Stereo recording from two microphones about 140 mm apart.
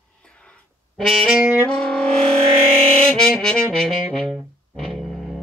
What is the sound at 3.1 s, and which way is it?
Brass instrument, 5° left (ahead or behind).